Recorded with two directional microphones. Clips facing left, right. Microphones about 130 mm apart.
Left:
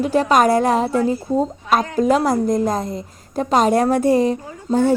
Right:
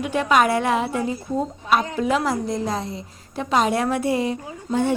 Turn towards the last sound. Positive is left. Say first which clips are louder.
# left 5 dB
turn(degrees=40)  # may be behind; listen again after turning